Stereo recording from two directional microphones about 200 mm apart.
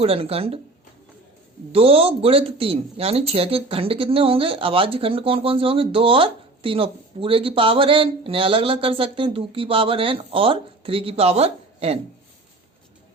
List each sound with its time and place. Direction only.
0.0 s speech: 30° right (ahead or behind)
1.7 s speech: 30° right (ahead or behind)